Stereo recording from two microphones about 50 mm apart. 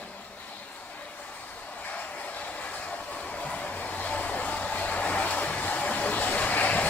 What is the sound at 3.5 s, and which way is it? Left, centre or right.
Vehicle, left.